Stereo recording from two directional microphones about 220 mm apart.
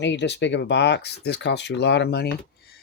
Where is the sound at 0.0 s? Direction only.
50° left (ahead or behind).